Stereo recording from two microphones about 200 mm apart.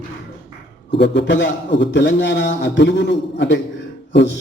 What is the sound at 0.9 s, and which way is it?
A man's voice, 60° left (ahead or behind).